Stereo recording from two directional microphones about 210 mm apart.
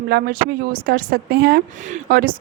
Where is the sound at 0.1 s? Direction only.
45° right (ahead or behind).